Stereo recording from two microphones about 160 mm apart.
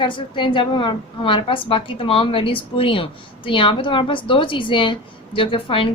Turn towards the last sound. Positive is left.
turn(degrees=35)  # may be behind; listen again after turning